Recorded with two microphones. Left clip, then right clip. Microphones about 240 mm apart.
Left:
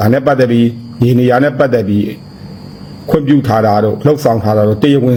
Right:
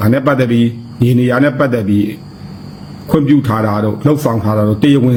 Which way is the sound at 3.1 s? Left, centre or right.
Centre.